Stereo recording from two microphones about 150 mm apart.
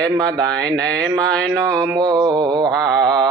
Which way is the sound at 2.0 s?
30° right (ahead or behind).